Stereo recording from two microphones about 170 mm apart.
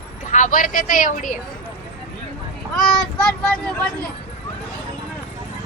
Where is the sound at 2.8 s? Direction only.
5° left (ahead or behind).